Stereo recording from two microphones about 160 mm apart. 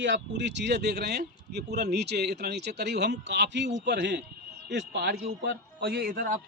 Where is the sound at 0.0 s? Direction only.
90° right.